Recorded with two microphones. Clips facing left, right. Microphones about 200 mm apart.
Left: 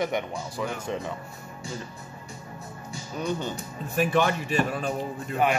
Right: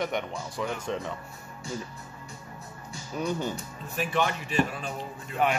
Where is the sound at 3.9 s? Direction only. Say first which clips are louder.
Left 5 dB; 45° left (ahead or behind).